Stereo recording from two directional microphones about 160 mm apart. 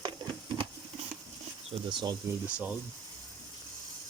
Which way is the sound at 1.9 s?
30° right (ahead or behind).